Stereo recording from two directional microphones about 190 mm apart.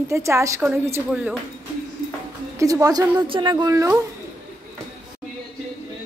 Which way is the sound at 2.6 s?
15° right (ahead or behind).